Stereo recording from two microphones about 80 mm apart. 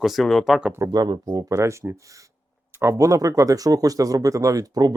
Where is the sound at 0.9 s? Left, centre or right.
Right.